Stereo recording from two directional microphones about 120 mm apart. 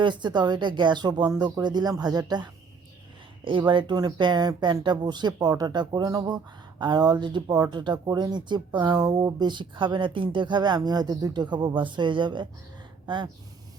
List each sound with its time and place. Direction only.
0.0 s speech: 40° right (ahead or behind)